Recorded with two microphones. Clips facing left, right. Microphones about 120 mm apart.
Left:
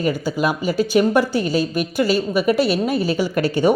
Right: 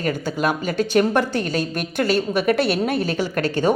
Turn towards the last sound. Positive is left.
turn(degrees=10)  # may be behind; listen again after turning